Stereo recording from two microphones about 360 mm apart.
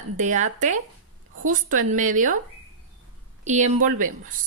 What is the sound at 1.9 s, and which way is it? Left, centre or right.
Speech, right.